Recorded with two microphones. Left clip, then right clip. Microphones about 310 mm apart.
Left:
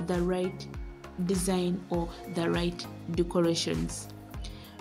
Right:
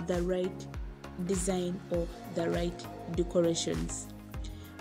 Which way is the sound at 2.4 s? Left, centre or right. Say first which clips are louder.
Left 2 dB; centre.